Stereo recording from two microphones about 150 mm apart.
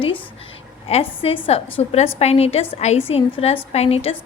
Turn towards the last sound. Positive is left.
turn(degrees=40)  # may be behind; listen again after turning